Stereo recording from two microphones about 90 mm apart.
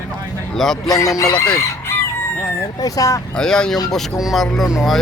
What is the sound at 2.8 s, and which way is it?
Speech, 40° left (ahead or behind).